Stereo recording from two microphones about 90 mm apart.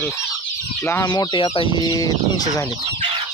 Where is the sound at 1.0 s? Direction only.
50° left (ahead or behind).